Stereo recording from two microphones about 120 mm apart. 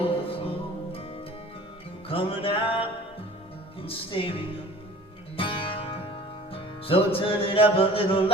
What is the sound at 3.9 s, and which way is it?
Music, 50° left (ahead or behind).